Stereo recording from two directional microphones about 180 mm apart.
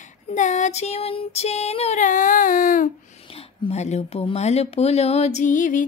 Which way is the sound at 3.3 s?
35° left (ahead or behind).